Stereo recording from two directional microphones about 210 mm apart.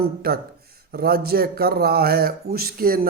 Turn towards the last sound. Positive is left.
turn(degrees=-45)  # may be behind; listen again after turning